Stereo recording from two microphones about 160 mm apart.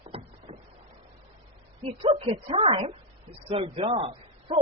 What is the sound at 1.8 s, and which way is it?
A woman's voice, 30° right (ahead or behind).